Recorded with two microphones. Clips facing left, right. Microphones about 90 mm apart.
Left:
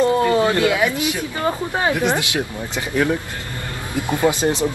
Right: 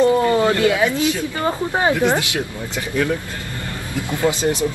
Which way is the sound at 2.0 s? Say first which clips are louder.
Right 1 dB; 20° left (ahead or behind).